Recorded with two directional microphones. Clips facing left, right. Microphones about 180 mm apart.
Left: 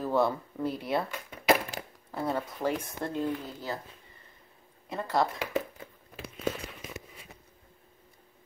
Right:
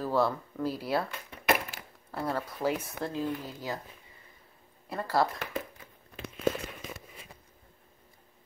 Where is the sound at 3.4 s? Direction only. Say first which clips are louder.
Even; 10° right (ahead or behind).